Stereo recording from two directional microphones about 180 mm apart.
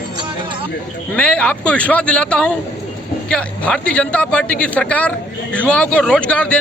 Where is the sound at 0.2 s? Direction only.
25° right (ahead or behind).